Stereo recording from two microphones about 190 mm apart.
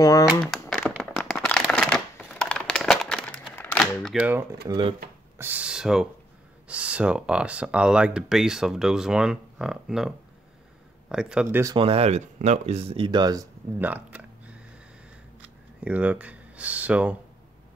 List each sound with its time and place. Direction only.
0.4 s shuffling cards: centre (ahead or behind)
4.6 s speech: 25° right (ahead or behind)
5.4 s speech: 5° right (ahead or behind)
11.7 s speech: 30° right (ahead or behind); by 14.6 s 10° right (ahead or behind)
15.8 s speech: 5° right (ahead or behind)